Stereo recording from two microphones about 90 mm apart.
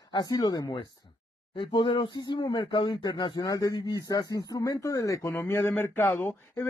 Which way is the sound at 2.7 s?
65° left (ahead or behind).